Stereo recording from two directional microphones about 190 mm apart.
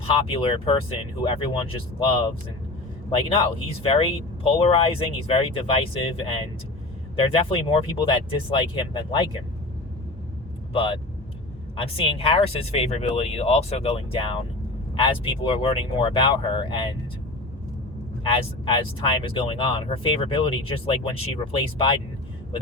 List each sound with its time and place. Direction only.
0.1 s speech: 30° left (ahead or behind)
3.8 s speech: 30° left (ahead or behind)
10.7 s speech: 30° left (ahead or behind)
18.3 s speech: 25° left (ahead or behind)